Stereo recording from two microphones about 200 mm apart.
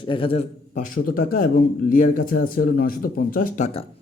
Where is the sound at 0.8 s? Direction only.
45° left (ahead or behind).